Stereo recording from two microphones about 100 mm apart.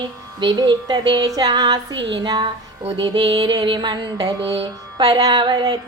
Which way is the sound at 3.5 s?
50° right (ahead or behind).